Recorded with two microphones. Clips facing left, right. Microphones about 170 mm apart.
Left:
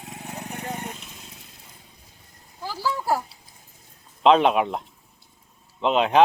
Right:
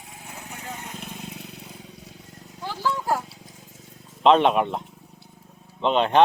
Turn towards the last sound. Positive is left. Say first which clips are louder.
# even
turn(degrees=5)  # may be behind; listen again after turning